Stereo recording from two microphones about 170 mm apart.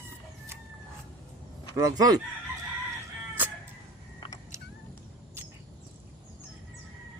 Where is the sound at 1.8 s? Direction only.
20° right (ahead or behind).